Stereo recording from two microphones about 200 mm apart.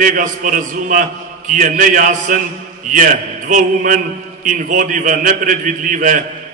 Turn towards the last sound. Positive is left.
turn(degrees=-40)  # may be behind; listen again after turning